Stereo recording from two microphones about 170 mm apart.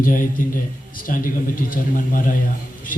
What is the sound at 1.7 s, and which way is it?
Speech, 55° left (ahead or behind).